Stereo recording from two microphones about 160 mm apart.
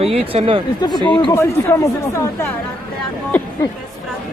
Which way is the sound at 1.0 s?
30° left (ahead or behind).